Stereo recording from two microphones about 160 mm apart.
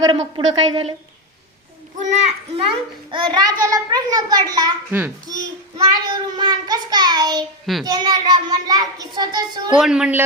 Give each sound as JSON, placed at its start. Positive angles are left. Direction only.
{"t": 0.0, "sound": "a child's voice", "side_deg": -25}
{"t": 2.6, "sound": "a child's voice", "side_deg": -30}
{"t": 4.9, "sound": "a child's voice", "side_deg": -15}
{"t": 5.3, "sound": "a child's voice", "side_deg": -25}
{"t": 9.7, "sound": "speech", "side_deg": -5}